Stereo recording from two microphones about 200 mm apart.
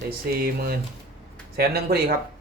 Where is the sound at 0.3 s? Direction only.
50° right (ahead or behind).